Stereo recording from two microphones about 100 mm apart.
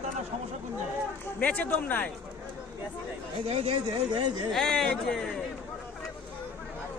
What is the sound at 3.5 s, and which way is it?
Speech, 80° right.